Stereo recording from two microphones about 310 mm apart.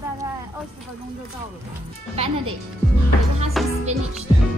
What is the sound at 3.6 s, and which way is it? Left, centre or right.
Music, centre.